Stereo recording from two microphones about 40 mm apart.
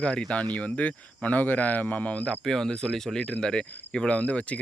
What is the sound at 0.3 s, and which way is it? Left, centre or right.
Speech, left.